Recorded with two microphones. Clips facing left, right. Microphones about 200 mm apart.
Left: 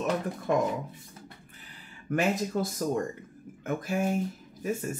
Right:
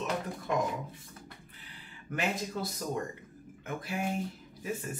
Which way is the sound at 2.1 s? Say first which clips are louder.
Left 6 dB; 45° left (ahead or behind).